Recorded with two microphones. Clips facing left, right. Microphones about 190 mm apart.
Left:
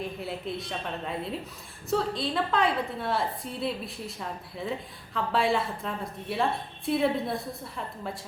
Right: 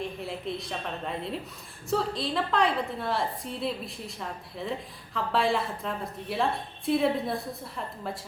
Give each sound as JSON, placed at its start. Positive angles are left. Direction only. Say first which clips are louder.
{"t": 0.0, "sound": "a woman's voice", "louder": "even", "side_deg": 0}